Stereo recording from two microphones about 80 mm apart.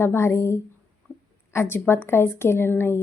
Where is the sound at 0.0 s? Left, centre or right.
Left.